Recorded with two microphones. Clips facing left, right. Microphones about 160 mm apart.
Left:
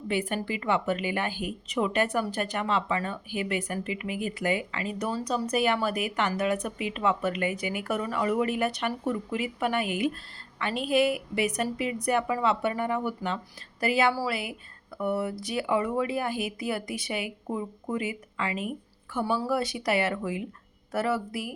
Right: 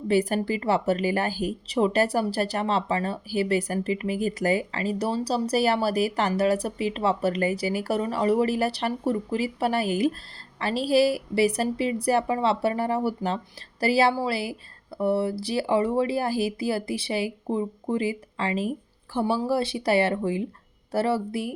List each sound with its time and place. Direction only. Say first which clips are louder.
0.1 s speech: right 6 dB; 40° right (ahead or behind)